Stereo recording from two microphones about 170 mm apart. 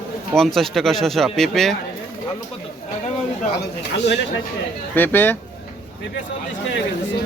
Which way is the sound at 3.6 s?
85° left.